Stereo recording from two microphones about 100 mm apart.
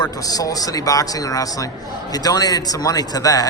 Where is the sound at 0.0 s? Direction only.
35° left (ahead or behind).